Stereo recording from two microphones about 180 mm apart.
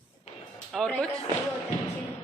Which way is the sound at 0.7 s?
5° left (ahead or behind).